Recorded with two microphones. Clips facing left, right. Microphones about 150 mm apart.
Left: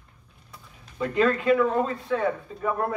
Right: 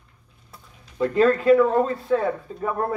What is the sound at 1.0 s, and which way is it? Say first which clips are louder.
A man's voice: right 4 dB; 35° right (ahead or behind).